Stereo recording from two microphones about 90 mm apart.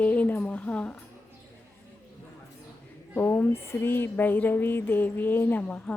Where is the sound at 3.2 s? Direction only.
25° left (ahead or behind).